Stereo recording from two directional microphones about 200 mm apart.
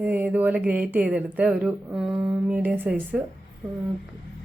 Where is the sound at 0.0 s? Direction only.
10° right (ahead or behind).